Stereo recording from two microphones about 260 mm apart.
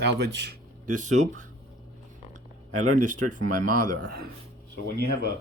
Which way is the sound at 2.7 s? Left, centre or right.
Right.